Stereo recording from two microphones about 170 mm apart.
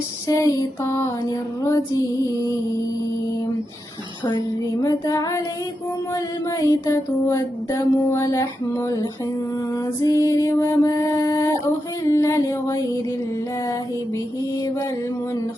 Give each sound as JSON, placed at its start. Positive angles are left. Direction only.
{"t": 0.3, "sound": "music", "side_deg": 20}
{"t": 4.8, "sound": "music", "side_deg": 20}
{"t": 10.0, "sound": "music", "side_deg": 20}